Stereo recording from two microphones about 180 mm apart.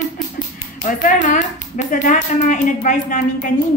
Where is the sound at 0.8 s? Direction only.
45° left (ahead or behind).